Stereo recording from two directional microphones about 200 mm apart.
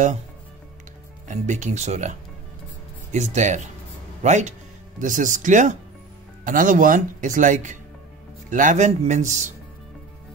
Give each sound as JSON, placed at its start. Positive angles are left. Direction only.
{"t": 1.2, "sound": "speech", "side_deg": -35}